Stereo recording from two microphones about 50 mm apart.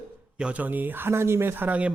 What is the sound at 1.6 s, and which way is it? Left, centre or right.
Speech, right.